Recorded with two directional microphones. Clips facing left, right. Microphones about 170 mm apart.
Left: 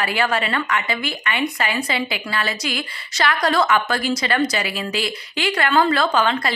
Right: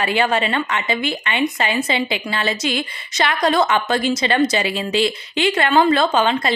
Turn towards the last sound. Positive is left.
turn(degrees=-20)  # may be behind; listen again after turning